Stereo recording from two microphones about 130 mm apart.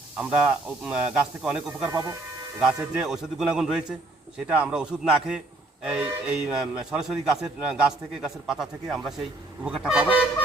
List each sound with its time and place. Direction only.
0.2 s speech: 10° right (ahead or behind)
1.9 s speech: 20° right (ahead or behind)
2.6 s a man's voice: 5° right (ahead or behind)